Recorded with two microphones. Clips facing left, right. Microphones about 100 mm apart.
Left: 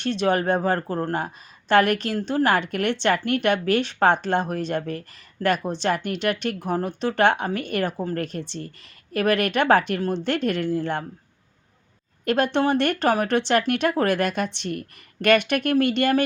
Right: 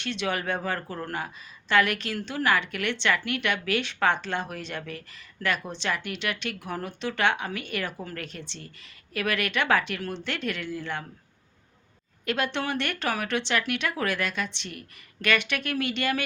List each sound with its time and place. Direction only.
0.0 s a woman's voice: 40° left (ahead or behind)
12.2 s speech: 45° left (ahead or behind)